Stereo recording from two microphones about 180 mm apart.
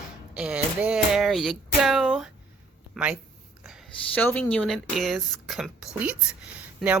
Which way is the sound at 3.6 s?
5° right (ahead or behind).